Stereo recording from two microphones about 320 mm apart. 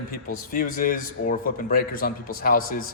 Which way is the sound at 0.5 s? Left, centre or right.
Left.